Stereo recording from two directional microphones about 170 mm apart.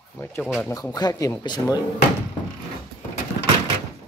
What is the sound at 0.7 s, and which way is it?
Speech, 25° left (ahead or behind).